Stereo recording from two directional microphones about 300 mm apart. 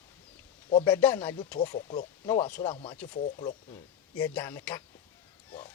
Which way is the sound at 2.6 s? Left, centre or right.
Centre.